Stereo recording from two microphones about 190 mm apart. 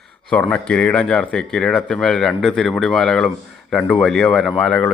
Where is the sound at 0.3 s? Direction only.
5° left (ahead or behind).